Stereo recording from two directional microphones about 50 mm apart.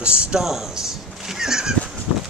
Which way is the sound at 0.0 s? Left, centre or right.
Right.